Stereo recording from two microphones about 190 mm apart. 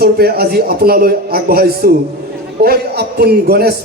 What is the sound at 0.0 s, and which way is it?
A man's voice, 55° right (ahead or behind).